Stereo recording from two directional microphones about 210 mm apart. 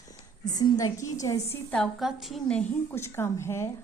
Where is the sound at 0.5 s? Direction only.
15° left (ahead or behind).